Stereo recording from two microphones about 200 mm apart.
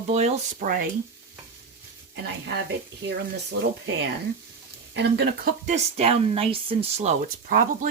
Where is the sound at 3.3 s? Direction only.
60° right (ahead or behind).